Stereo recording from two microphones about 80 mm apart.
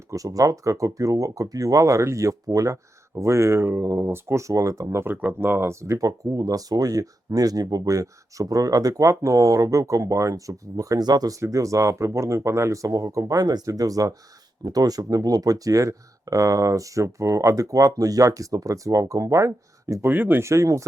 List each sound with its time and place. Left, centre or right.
0.1 s speech: right
11.3 s speech: right
20.1 s speech: right
20.5 s speech: right